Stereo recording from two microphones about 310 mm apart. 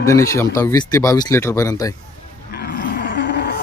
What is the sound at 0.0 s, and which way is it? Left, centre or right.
Speech, centre.